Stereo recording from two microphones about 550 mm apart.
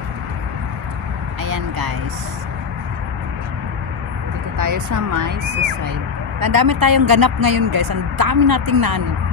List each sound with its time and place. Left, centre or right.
1.4 s speech: right
4.6 s speech: right
6.4 s speech: right